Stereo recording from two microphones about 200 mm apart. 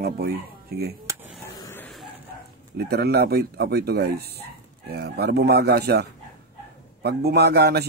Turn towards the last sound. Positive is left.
turn(degrees=-55)  # may be behind; listen again after turning